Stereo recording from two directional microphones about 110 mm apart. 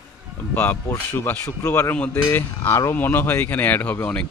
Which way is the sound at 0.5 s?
15° left (ahead or behind).